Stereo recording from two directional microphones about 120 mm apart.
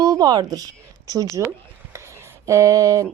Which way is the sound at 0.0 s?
30° right (ahead or behind).